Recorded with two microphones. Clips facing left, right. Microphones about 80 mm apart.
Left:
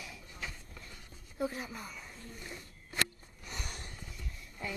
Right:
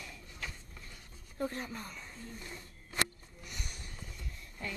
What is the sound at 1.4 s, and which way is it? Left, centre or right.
Speech, centre.